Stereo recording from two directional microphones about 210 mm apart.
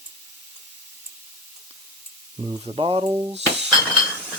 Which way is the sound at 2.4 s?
30° right (ahead or behind).